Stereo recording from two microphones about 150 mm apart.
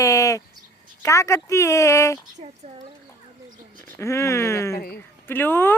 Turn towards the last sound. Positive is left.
turn(degrees=15)  # may be behind; listen again after turning